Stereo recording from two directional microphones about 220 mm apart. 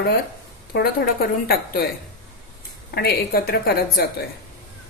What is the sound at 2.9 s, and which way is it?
Speech, 45° left (ahead or behind).